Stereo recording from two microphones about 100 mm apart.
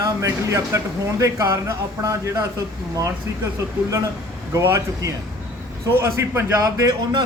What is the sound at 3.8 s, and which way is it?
A man's voice, 30° right (ahead or behind).